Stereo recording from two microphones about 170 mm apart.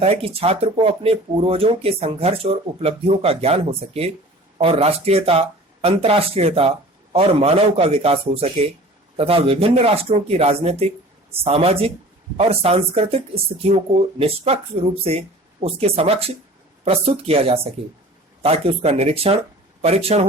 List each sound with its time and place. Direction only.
0.0 s speech: 35° right (ahead or behind)
15.6 s speech: 35° right (ahead or behind)